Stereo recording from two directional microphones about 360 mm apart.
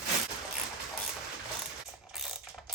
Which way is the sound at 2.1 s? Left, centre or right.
Centre.